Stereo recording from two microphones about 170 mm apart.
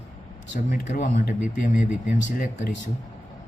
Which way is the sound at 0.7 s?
50° left (ahead or behind).